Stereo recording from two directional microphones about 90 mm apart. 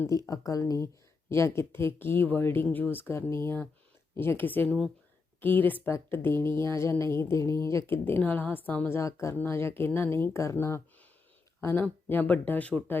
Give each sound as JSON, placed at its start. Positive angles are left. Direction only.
{"t": 0.3, "sound": "speech", "side_deg": 40}
{"t": 9.0, "sound": "speech", "side_deg": 35}